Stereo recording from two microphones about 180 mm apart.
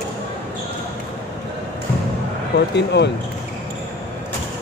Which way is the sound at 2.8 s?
70° left (ahead or behind).